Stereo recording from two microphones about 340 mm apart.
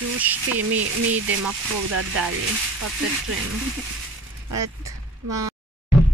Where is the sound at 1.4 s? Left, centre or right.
Right.